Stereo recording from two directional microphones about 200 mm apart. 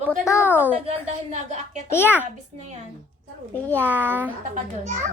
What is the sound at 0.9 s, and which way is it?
Speech, 35° right (ahead or behind).